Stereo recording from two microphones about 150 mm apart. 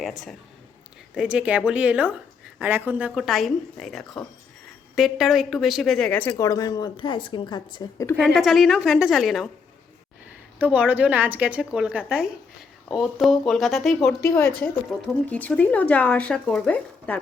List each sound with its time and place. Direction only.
1.1 s a woman's voice: 10° right (ahead or behind); by 6.3 s 10° left (ahead or behind)
6.3 s a woman's voice: 25° left (ahead or behind)
8.2 s a woman's voice: centre (ahead or behind)
10.6 s a woman's voice: 10° right (ahead or behind)
14.2 s speech: 15° left (ahead or behind)